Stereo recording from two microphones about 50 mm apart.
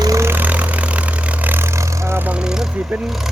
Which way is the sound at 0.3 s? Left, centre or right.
Right.